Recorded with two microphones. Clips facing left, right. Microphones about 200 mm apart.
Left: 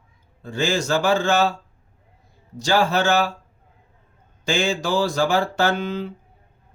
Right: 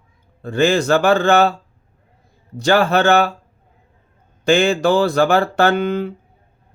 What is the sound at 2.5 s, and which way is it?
Speech, 60° right (ahead or behind).